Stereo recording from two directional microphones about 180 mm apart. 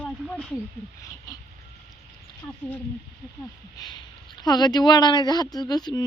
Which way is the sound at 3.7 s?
25° left (ahead or behind).